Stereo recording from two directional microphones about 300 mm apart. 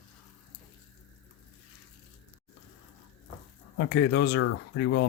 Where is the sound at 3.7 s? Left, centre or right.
Left.